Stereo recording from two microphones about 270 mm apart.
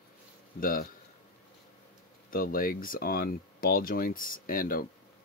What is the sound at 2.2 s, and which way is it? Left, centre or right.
Speech, left.